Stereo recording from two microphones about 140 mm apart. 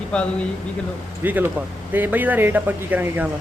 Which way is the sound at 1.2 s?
15° right (ahead or behind).